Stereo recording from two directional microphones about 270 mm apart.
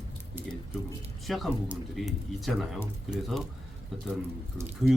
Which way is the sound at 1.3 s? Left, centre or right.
Centre.